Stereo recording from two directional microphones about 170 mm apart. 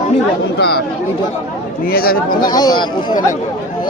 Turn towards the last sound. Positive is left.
turn(degrees=25)  # may be behind; listen again after turning